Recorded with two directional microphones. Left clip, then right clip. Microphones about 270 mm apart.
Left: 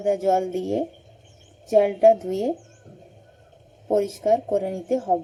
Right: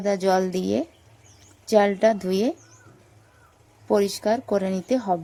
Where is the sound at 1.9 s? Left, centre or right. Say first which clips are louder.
Left 4 dB; right.